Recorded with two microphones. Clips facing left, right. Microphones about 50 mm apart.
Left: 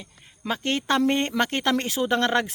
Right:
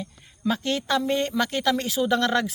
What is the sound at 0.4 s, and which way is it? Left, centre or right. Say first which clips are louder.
Speech: even; left.